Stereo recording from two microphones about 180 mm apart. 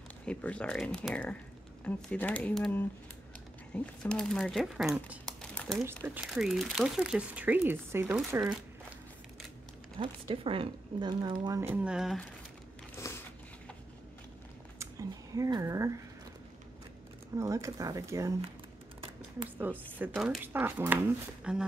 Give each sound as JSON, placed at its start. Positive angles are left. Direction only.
{"t": 0.2, "sound": "speech", "side_deg": 5}
{"t": 5.4, "sound": "a sound", "side_deg": 5}
{"t": 6.0, "sound": "speech", "side_deg": -5}
{"t": 9.9, "sound": "a woman's voice", "side_deg": -30}
{"t": 11.7, "sound": "speech", "side_deg": -5}
{"t": 13.0, "sound": "a sound", "side_deg": 15}
{"t": 14.8, "sound": "speech", "side_deg": -20}
{"t": 17.4, "sound": "speech", "side_deg": -15}
{"t": 19.6, "sound": "speech", "side_deg": -10}